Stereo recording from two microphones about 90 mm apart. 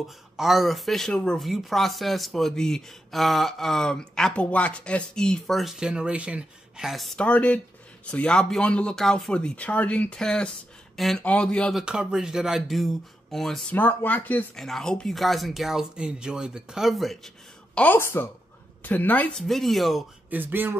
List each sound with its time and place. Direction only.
0.4 s speech: centre (ahead or behind)
6.9 s speech: centre (ahead or behind)
7.2 s speech: 15° left (ahead or behind)
11.7 s speech: 10° right (ahead or behind)
13.7 s speech: 20° left (ahead or behind)
14.5 s speech: 5° left (ahead or behind)
17.9 s speech: 25° left (ahead or behind)
19.3 s speech: 5° left (ahead or behind)
20.2 s speech: 20° right (ahead or behind)